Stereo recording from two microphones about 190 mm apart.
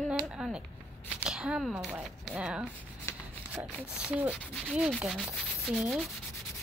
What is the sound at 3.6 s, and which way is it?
Speech, 5° right (ahead or behind).